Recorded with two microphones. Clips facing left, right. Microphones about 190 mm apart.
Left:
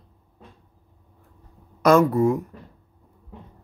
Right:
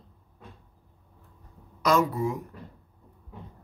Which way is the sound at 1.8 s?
55° left (ahead or behind).